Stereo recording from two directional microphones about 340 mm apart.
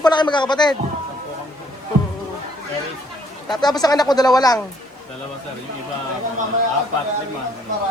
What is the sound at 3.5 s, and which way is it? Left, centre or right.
Speech, centre.